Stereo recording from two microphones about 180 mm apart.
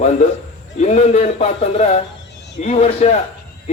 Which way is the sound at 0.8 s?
40° left (ahead or behind).